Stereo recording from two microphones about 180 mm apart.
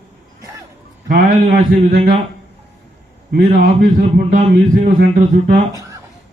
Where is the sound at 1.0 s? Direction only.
50° right (ahead or behind).